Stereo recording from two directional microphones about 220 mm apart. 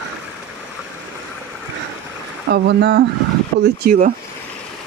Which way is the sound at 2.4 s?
50° right (ahead or behind).